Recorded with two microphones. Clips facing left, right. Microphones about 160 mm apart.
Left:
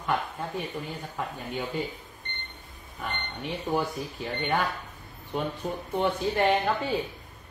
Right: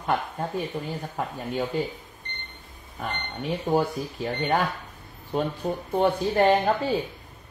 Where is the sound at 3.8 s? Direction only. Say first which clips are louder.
Right 4 dB; 40° right (ahead or behind).